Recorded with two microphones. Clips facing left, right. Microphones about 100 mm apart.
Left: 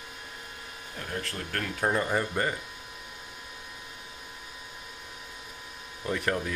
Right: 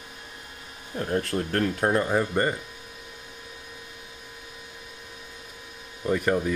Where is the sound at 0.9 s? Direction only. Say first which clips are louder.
Right 10 dB; 35° right (ahead or behind).